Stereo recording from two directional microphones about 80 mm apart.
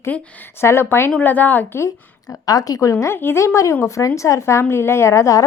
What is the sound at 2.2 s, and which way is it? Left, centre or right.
Speech, left.